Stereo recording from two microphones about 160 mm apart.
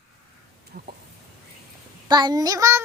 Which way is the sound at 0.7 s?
55° right (ahead or behind).